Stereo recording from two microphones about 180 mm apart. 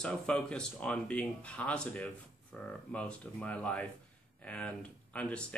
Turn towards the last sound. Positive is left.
turn(degrees=5)  # may be behind; listen again after turning